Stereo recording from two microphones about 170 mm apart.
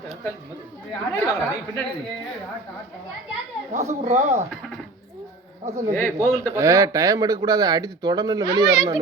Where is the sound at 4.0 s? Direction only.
40° right (ahead or behind).